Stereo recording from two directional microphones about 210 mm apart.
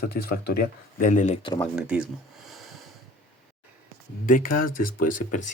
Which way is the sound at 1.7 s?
5° right (ahead or behind).